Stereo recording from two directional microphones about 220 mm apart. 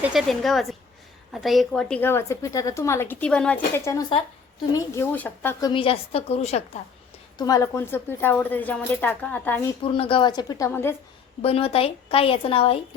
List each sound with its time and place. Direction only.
0.1 s a woman's voice: centre (ahead or behind); by 6.6 s 30° left (ahead or behind)
7.3 s a woman's voice: 15° left (ahead or behind)
9.8 s a woman's voice: 25° left (ahead or behind)
11.4 s a woman's voice: 25° left (ahead or behind)